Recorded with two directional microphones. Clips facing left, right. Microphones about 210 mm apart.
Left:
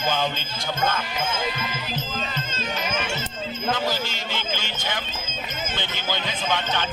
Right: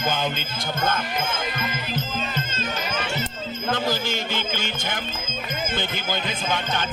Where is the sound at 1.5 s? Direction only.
50° right (ahead or behind).